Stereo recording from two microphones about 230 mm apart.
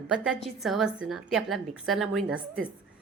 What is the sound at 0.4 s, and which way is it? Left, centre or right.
A woman's voice, centre.